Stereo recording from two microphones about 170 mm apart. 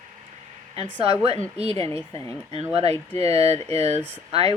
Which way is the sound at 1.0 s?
35° right (ahead or behind).